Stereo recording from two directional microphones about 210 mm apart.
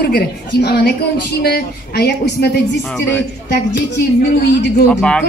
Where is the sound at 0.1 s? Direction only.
50° left (ahead or behind).